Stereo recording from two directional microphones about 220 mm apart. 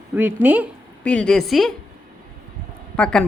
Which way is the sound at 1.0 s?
5° left (ahead or behind).